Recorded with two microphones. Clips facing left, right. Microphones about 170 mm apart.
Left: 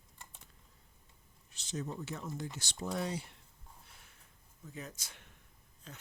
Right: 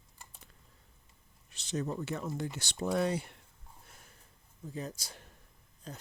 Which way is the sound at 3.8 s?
45° right (ahead or behind).